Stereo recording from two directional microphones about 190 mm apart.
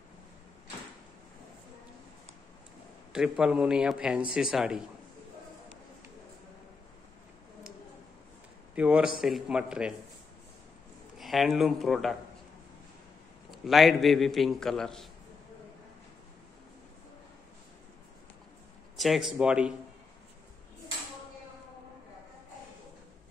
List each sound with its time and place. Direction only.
3.1 s a man's voice: 5° right (ahead or behind)
8.7 s a man's voice: 5° right (ahead or behind)
11.1 s a man's voice: centre (ahead or behind)
13.7 s a man's voice: centre (ahead or behind)
18.9 s a man's voice: centre (ahead or behind)